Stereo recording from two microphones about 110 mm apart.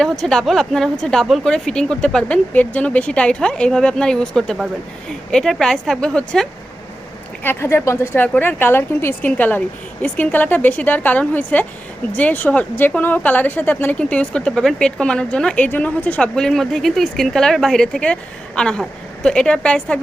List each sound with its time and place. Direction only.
0.0 s a woman's voice: 5° left (ahead or behind)
7.4 s a woman's voice: 20° left (ahead or behind)